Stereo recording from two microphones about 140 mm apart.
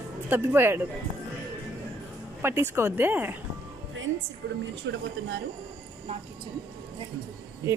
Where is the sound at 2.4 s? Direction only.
15° right (ahead or behind).